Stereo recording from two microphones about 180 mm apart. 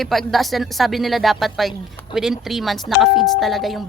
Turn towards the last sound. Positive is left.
turn(degrees=0)  # may be behind; listen again after turning